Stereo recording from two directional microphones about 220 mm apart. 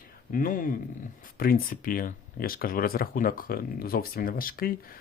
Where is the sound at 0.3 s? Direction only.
35° left (ahead or behind).